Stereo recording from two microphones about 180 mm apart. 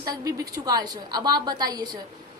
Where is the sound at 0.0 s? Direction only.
20° right (ahead or behind).